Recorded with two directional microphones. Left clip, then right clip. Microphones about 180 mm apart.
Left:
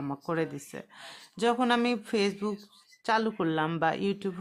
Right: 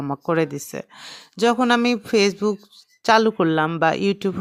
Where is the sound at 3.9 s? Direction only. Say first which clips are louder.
Right 9 dB; 40° right (ahead or behind).